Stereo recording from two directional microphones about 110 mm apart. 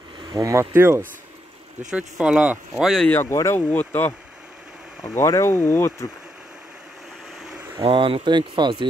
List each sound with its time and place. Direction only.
0.2 s speech: 40° right (ahead or behind); by 1.0 s 25° right (ahead or behind)
1.9 s speech: 10° right (ahead or behind)
2.7 s speech: centre (ahead or behind)
3.1 s speech: 20° left (ahead or behind)
5.1 s speech: 25° left (ahead or behind)
7.8 s speech: 55° right (ahead or behind)